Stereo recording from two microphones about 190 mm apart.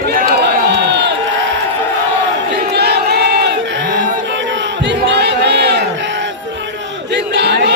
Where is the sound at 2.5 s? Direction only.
60° right (ahead or behind).